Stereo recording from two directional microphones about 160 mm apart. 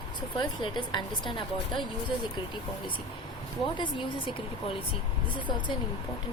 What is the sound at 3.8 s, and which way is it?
A woman's voice, 30° left (ahead or behind).